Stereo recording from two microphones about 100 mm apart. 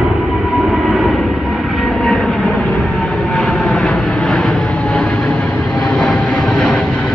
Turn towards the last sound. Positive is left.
turn(degrees=10)  # may be behind; listen again after turning